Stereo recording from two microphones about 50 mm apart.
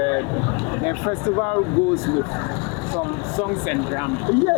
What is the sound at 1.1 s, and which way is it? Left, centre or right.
Speech, left.